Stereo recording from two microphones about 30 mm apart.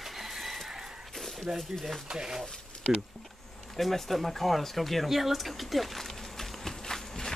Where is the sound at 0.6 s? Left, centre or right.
Centre.